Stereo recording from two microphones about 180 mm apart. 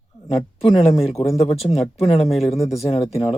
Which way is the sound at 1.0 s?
35° left (ahead or behind).